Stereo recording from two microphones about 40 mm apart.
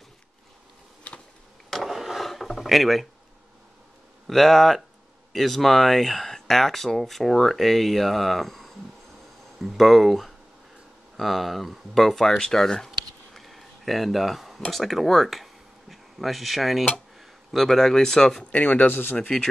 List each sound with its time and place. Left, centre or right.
1.1 s a sound: left
1.9 s wood: centre
2.2 s a sound: centre
4.3 s speech: centre
9.8 s speech: centre
18.4 s speech: left